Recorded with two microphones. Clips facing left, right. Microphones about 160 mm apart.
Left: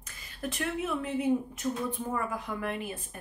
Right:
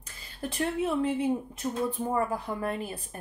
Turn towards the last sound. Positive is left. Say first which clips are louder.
# right 2 dB
turn(degrees=-35)  # may be behind; listen again after turning